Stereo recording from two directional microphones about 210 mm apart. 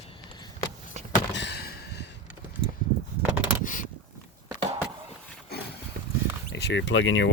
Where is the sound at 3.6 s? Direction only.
40° left (ahead or behind).